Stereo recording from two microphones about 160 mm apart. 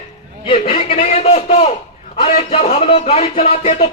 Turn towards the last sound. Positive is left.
turn(degrees=40)  # may be behind; listen again after turning